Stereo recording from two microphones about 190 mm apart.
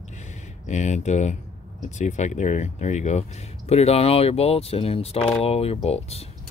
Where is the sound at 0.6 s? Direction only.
40° left (ahead or behind).